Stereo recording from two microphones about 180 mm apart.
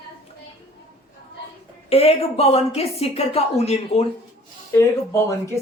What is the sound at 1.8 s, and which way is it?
A woman's voice, 35° left (ahead or behind).